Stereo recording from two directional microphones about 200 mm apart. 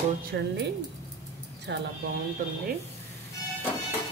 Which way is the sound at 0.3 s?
60° right (ahead or behind).